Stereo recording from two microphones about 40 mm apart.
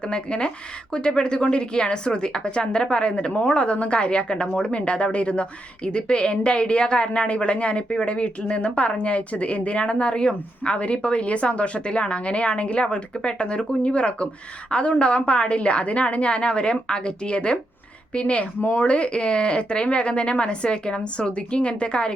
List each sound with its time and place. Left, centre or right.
0.1 s a woman's voice: left